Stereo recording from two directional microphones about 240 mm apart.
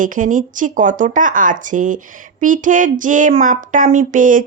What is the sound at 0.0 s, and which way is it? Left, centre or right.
A woman's voice, right.